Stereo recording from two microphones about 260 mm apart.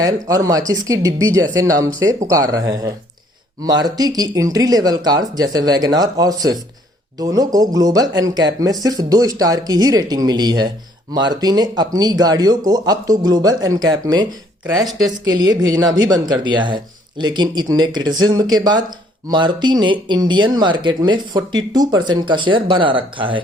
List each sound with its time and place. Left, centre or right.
0.0 s speech: centre